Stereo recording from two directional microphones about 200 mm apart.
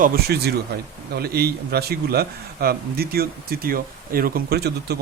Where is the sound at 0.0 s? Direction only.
55° right (ahead or behind).